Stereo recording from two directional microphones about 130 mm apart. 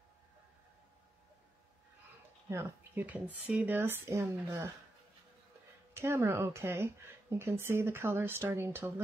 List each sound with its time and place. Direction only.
2.5 s speech: 15° right (ahead or behind)
5.9 s speech: 20° right (ahead or behind)